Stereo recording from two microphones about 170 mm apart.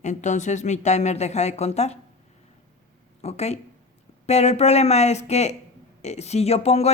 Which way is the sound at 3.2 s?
40° left (ahead or behind).